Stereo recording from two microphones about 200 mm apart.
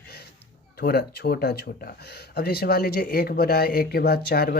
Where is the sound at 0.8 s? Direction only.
50° left (ahead or behind).